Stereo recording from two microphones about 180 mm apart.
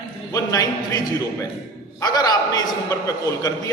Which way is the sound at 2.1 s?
20° left (ahead or behind).